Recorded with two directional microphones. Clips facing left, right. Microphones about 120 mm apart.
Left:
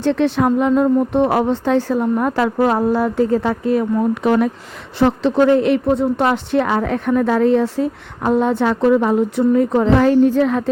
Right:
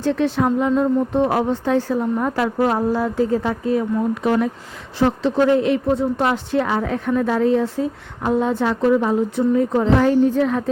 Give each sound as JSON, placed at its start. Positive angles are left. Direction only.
{"t": 0.0, "sound": "a woman's voice", "side_deg": 70}